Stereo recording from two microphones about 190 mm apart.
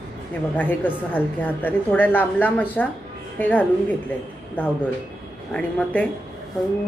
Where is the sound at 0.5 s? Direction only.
10° left (ahead or behind).